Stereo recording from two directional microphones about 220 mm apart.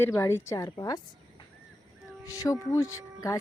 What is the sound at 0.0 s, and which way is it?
Speech, 10° left (ahead or behind).